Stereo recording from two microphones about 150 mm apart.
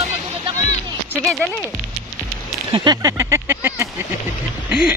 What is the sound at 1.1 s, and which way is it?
Music, 5° left (ahead or behind).